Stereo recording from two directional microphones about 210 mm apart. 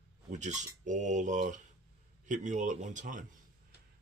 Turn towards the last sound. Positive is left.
turn(degrees=-40)  # may be behind; listen again after turning